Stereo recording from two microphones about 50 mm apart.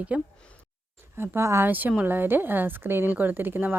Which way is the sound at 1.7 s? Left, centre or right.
Right.